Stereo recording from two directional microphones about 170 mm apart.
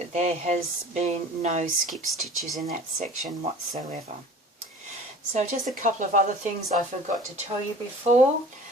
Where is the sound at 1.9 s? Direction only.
Centre (ahead or behind).